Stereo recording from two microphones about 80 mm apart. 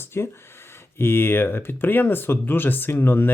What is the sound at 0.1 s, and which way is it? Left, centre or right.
Speech, left.